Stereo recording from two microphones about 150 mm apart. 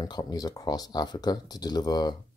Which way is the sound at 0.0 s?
25° left (ahead or behind).